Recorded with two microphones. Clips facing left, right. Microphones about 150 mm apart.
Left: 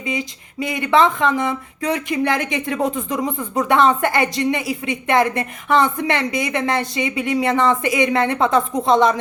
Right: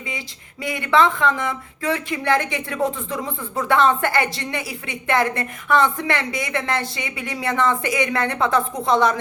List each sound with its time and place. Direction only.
0.1 s speech: 20° left (ahead or behind)